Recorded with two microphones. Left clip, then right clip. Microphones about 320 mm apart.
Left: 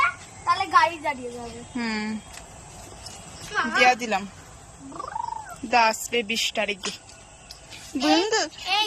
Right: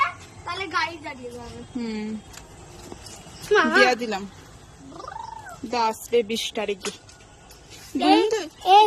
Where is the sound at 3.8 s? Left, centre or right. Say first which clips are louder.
Even; centre.